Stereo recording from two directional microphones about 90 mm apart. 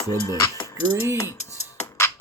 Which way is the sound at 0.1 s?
45° left (ahead or behind).